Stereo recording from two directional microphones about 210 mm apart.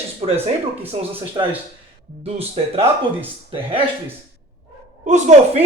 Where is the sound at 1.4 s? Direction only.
20° right (ahead or behind).